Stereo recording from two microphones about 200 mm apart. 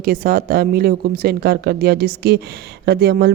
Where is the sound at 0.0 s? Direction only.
45° right (ahead or behind).